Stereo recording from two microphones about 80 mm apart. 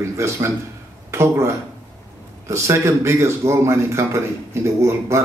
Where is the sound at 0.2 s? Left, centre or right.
Right.